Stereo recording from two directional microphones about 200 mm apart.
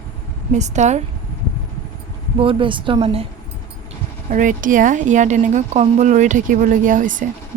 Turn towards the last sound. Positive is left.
turn(degrees=-40)  # may be behind; listen again after turning